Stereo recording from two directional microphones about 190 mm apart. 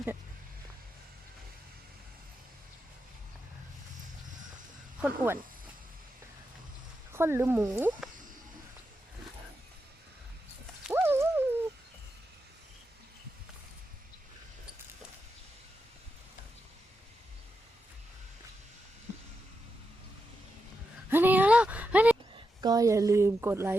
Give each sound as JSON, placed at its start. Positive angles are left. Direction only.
{"t": 4.9, "sound": "speech", "side_deg": -10}
{"t": 7.1, "sound": "speech", "side_deg": -15}
{"t": 10.8, "sound": "dog", "side_deg": -10}
{"t": 21.1, "sound": "a sound", "side_deg": -10}
{"t": 22.4, "sound": "speech", "side_deg": -20}